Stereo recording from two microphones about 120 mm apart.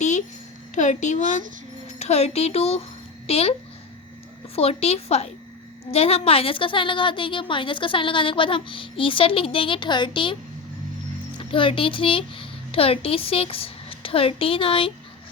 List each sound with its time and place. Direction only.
0.8 s speech: 90° left
2.0 s speech: 65° left (ahead or behind)
4.5 s a woman's voice: 55° left (ahead or behind)
11.3 s speech: 45° left (ahead or behind)